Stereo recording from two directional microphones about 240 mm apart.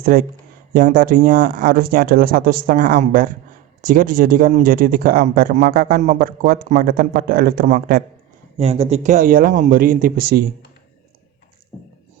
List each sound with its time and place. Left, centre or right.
0.0 s speech: right